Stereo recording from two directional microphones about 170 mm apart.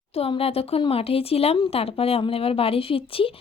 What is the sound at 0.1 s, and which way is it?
Speech, 35° left (ahead or behind).